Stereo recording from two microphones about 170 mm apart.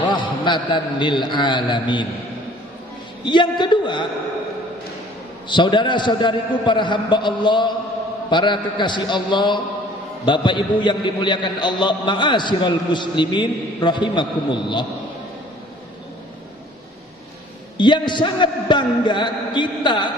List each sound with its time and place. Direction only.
0.0 s a man's voice: 25° left (ahead or behind)
3.3 s a man's voice: 25° left (ahead or behind)
5.5 s a man's voice: 25° left (ahead or behind)
17.7 s a man's voice: 25° left (ahead or behind)